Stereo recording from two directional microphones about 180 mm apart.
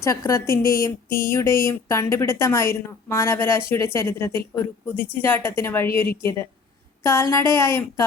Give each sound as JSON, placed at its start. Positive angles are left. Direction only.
{"t": 0.0, "sound": "a woman's voice", "side_deg": 15}